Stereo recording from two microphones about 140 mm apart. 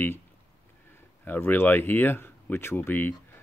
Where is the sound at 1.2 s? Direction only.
15° left (ahead or behind).